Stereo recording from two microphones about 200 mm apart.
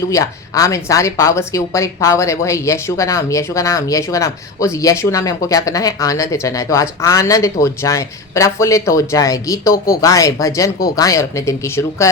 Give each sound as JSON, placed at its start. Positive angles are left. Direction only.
{"t": 0.1, "sound": "a woman's voice", "side_deg": 15}
{"t": 9.7, "sound": "speech", "side_deg": 45}
{"t": 10.0, "sound": "a woman's voice", "side_deg": 15}